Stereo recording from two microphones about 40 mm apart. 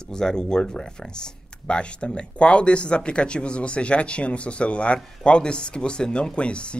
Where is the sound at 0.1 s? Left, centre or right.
Centre.